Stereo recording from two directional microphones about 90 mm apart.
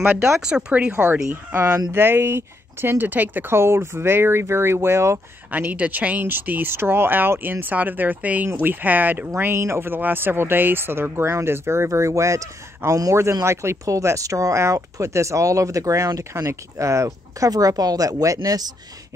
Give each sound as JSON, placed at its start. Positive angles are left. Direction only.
{"t": 0.0, "sound": "speech", "side_deg": -25}
{"t": 0.4, "sound": "speech", "side_deg": -10}
{"t": 5.5, "sound": "speech", "side_deg": -15}